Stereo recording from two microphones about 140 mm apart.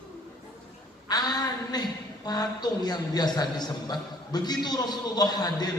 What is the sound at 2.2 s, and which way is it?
A man's voice, 30° left (ahead or behind).